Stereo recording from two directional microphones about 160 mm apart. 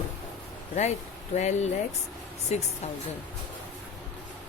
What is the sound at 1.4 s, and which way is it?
Speech, 45° left (ahead or behind).